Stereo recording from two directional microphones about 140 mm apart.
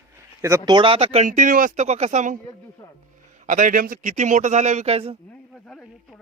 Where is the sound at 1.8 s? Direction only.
50° right (ahead or behind).